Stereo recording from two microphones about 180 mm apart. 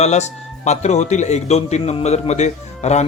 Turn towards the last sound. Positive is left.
turn(degrees=40)  # may be behind; listen again after turning